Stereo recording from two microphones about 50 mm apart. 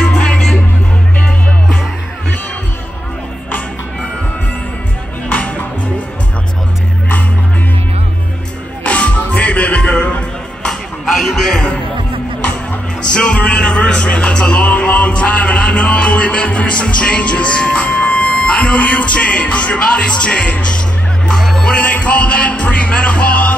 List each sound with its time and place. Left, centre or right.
0.0 s music: centre
5.3 s music: left
8.8 s music: left
10.6 s a sound: centre
13.1 s music: left
21.3 s music: centre
21.7 s music: left